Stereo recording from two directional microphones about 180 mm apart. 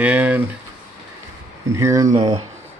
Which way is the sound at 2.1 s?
35° right (ahead or behind).